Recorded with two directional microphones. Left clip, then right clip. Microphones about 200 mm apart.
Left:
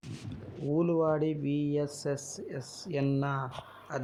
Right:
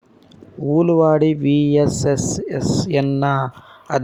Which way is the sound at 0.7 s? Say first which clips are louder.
Right 14 dB; 35° right (ahead or behind).